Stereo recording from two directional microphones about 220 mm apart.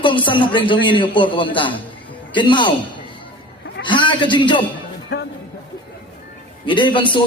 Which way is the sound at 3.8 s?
20° left (ahead or behind).